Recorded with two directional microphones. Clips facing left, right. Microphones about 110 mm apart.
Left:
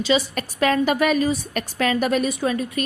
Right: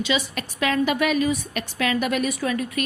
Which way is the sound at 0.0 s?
40° left (ahead or behind).